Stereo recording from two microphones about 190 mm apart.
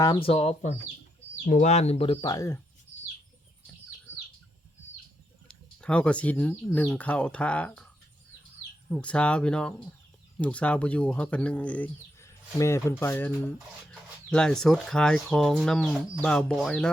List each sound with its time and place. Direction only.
0.0 s speech: 25° left (ahead or behind)
5.5 s speech: 5° left (ahead or behind)
8.9 s speech: 5° left (ahead or behind)